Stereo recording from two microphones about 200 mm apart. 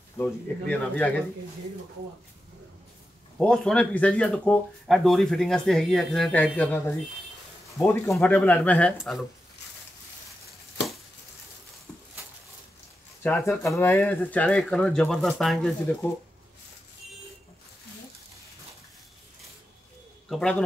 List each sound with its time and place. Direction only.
0.2 s speech: 5° left (ahead or behind)
3.3 s speech: 5° left (ahead or behind)
7.8 s speech: 15° left (ahead or behind)
13.2 s speech: 10° left (ahead or behind)
20.2 s a man's voice: 5° left (ahead or behind)